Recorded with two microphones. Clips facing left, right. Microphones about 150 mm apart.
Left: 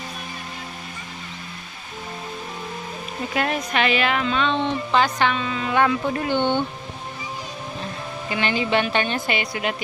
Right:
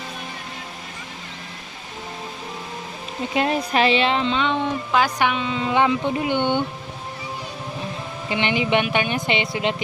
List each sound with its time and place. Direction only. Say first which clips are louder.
3.3 s speech: right 3 dB; 30° right (ahead or behind)
4.6 s speech: even; 10° right (ahead or behind)
8.3 s speech: right 2 dB; 20° right (ahead or behind)